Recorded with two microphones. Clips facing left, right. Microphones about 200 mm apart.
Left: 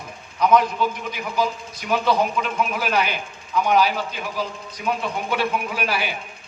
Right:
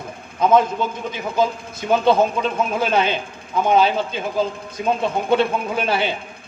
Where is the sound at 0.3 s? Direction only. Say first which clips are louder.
Right 2 dB; 25° right (ahead or behind).